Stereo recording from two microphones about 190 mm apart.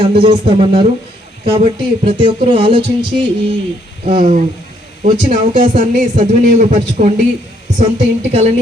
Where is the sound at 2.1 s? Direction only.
30° right (ahead or behind).